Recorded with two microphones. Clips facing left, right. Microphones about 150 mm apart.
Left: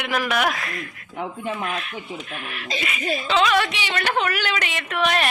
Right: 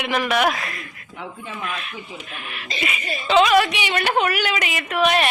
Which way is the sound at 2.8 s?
10° right (ahead or behind).